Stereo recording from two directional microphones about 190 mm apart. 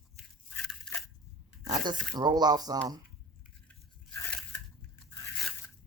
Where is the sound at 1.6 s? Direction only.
20° right (ahead or behind).